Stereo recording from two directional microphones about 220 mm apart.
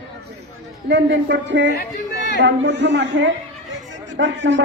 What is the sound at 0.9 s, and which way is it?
Speech, 55° right (ahead or behind).